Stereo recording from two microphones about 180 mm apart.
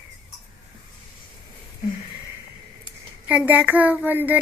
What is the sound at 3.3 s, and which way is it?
A child's voice, 10° right (ahead or behind).